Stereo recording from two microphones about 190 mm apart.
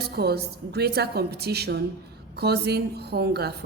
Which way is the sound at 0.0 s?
55° right (ahead or behind).